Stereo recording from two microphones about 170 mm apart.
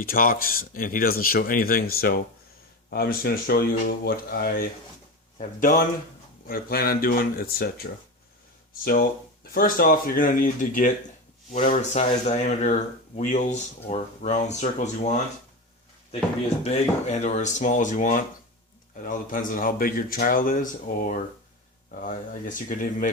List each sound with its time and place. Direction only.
0.0 s speech: 55° left (ahead or behind)
8.8 s speech: 60° left (ahead or behind); by 15.2 s 45° left (ahead or behind)
16.6 s speech: 40° left (ahead or behind)